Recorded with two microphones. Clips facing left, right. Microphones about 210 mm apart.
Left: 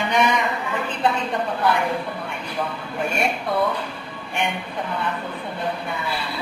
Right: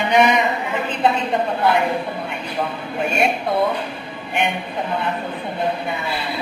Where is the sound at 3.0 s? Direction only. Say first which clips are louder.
Right 4 dB; 25° right (ahead or behind).